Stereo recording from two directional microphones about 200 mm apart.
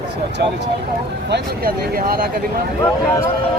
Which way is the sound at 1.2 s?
55° right (ahead or behind).